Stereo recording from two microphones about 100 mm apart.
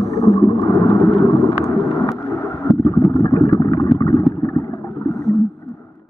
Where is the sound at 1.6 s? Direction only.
30° left (ahead or behind).